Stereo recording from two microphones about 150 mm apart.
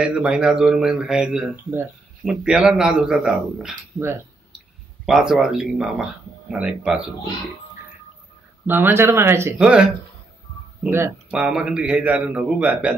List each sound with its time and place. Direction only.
0.0 s a man's voice: 5° right (ahead or behind)
8.6 s a man's voice: 15° right (ahead or behind)
9.6 s a man's voice: 5° right (ahead or behind)